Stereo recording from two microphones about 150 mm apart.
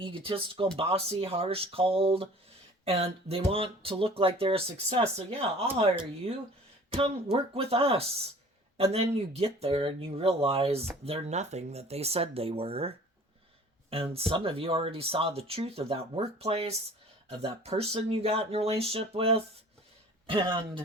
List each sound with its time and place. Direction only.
0.0 s speech: 35° right (ahead or behind)